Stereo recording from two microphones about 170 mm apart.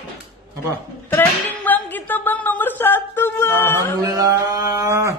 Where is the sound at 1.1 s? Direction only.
10° left (ahead or behind).